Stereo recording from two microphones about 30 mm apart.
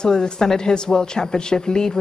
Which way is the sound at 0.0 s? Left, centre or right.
Left.